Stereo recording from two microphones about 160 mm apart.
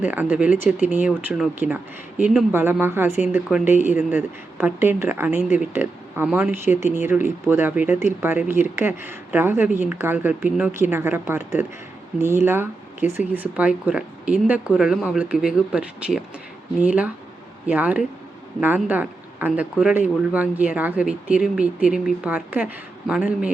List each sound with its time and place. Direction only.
0.9 s speech: 10° right (ahead or behind)
5.3 s speech: 45° left (ahead or behind)
5.5 s speech: 15° right (ahead or behind)